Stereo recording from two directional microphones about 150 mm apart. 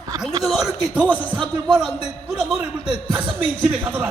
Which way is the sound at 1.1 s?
10° left (ahead or behind).